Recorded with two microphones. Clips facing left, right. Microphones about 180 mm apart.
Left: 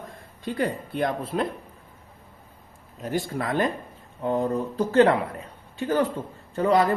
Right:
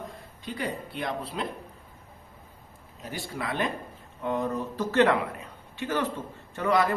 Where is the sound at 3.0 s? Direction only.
45° left (ahead or behind).